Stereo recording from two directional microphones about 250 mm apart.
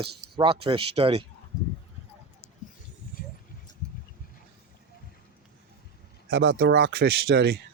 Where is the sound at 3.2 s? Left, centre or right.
Left.